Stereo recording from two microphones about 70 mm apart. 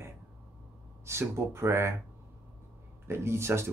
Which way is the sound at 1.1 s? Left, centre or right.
Right.